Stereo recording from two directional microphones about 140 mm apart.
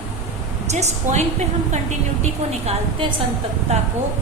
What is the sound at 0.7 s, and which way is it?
Speech, 55° right (ahead or behind).